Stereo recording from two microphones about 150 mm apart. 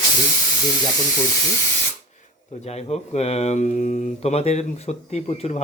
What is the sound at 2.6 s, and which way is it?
Speech, 45° left (ahead or behind).